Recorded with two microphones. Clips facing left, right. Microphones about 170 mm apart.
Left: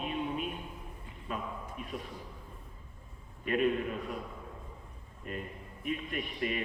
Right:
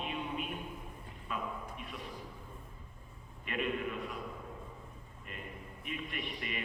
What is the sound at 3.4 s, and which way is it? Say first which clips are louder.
Speech: left 6 dB; 40° left (ahead or behind).